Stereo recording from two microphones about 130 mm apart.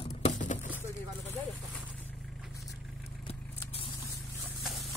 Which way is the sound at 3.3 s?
45° left (ahead or behind).